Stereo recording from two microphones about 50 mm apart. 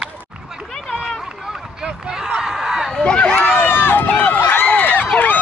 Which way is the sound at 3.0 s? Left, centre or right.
Centre.